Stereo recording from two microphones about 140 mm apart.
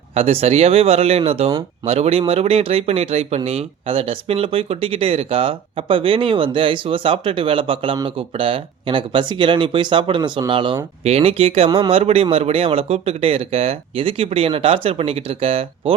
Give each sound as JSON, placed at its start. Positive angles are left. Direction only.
{"t": 0.1, "sound": "speech", "side_deg": -45}
{"t": 11.0, "sound": "speech", "side_deg": -45}